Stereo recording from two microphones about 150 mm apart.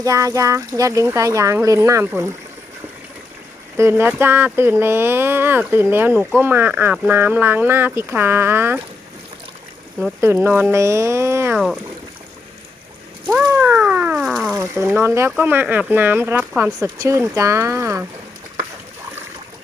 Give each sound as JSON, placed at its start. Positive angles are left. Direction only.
{"t": 0.0, "sound": "speech", "side_deg": -20}
{"t": 3.8, "sound": "speech", "side_deg": -15}
{"t": 10.2, "sound": "speech", "side_deg": -15}
{"t": 11.5, "sound": "speech", "side_deg": 0}
{"t": 13.2, "sound": "a sound", "side_deg": -15}
{"t": 14.8, "sound": "speech", "side_deg": -15}